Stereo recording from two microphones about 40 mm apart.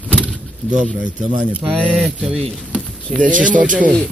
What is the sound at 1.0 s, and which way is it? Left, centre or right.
Speech, right.